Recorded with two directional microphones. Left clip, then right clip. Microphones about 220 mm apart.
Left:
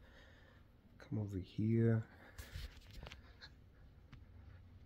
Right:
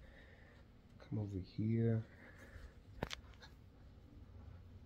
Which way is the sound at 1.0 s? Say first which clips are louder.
Left 1 dB; 35° left (ahead or behind).